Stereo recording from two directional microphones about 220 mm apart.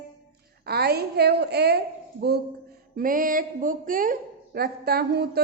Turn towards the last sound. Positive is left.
turn(degrees=-45)  # may be behind; listen again after turning